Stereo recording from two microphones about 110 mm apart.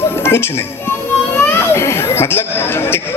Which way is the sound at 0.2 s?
20° left (ahead or behind).